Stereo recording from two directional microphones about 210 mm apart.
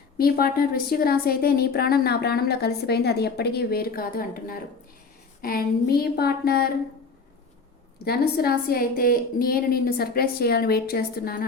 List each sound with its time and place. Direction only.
0.2 s a woman's voice: 45° left (ahead or behind)
8.0 s a woman's voice: 50° left (ahead or behind)